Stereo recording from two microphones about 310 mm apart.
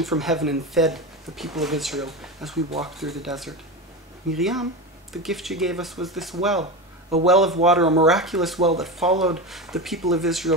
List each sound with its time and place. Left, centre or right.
0.0 s speech: centre
6.6 s a sound: centre
7.2 s speech: centre